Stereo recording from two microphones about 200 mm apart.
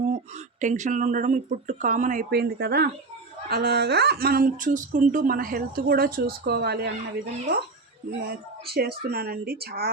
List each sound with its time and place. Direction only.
0.6 s speech: 40° right (ahead or behind); by 6.9 s 55° right (ahead or behind)
8.2 s speech: 50° right (ahead or behind)